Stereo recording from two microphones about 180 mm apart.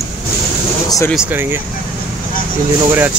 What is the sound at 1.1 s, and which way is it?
Speech, 5° right (ahead or behind).